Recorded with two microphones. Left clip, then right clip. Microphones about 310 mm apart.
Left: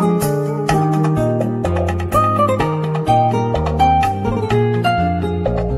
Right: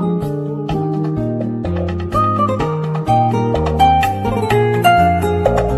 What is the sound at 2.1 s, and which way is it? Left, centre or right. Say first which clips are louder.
Music: left 1 dB; centre.